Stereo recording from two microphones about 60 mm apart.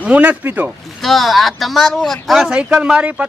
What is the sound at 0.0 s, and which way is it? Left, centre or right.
Speech, right.